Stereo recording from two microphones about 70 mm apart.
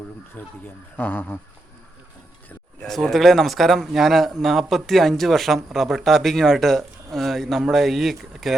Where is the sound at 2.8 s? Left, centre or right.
Centre.